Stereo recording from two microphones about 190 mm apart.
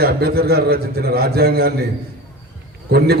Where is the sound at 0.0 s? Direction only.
55° right (ahead or behind).